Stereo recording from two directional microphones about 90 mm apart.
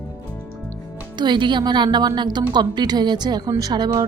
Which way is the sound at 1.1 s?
60° right (ahead or behind).